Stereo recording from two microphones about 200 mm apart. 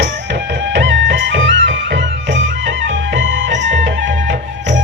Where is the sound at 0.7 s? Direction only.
60° right (ahead or behind).